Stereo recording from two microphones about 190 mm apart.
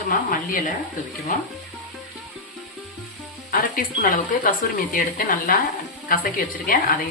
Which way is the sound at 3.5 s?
45° left (ahead or behind).